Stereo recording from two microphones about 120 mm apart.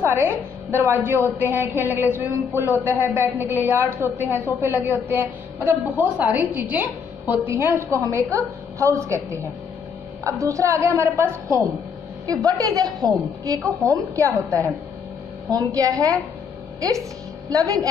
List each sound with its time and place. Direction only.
0.0 s a woman's voice: 20° right (ahead or behind)
17.5 s a woman's voice: 30° right (ahead or behind)